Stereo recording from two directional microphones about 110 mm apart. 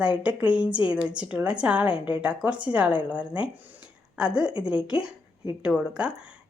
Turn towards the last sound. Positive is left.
turn(degrees=-10)  # may be behind; listen again after turning